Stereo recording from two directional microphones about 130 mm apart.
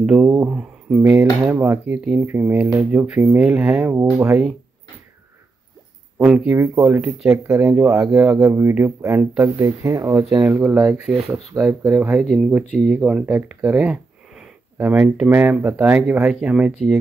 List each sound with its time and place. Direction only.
0.0 s speech: 10° right (ahead or behind)
3.9 s speech: 20° right (ahead or behind)
6.1 s speech: 10° right (ahead or behind)
7.2 s speech: 25° right (ahead or behind)
9.6 s speech: 25° right (ahead or behind); by 11.1 s 10° right (ahead or behind)
11.5 s speech: 20° right (ahead or behind)
12.1 s speech: centre (ahead or behind)